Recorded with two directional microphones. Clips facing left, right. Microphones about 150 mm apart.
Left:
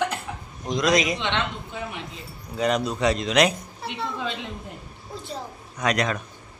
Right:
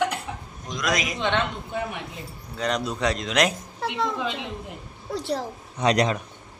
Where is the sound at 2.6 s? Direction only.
5° left (ahead or behind).